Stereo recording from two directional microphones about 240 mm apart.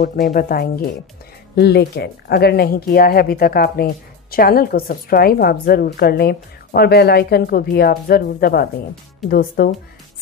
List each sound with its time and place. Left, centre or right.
0.0 s speech: left